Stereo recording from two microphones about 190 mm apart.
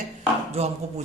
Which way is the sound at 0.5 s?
35° right (ahead or behind).